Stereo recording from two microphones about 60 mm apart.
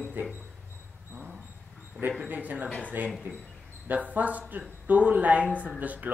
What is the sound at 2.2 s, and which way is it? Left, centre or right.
Speech, right.